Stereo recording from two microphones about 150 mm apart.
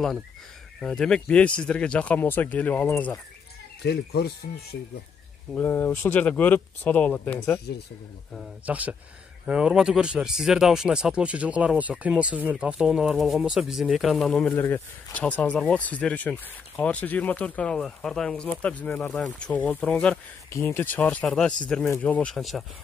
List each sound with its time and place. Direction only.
0.7 s speech: 5° left (ahead or behind)
3.8 s speech: 90° left
5.5 s speech: 15° left (ahead or behind)
8.4 s speech: 10° right (ahead or behind)
14.5 s speech: 15° left (ahead or behind)